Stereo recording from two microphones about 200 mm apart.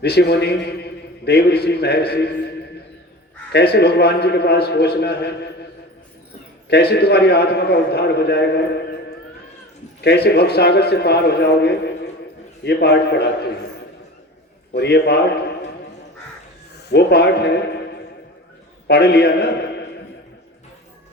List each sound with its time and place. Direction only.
0.0 s a man's voice: 55° left (ahead or behind)
3.5 s a man's voice: 55° left (ahead or behind)
6.7 s a man's voice: 55° left (ahead or behind)
14.7 s a man's voice: 55° left (ahead or behind)
16.9 s a man's voice: 55° left (ahead or behind)
18.9 s a man's voice: 55° left (ahead or behind)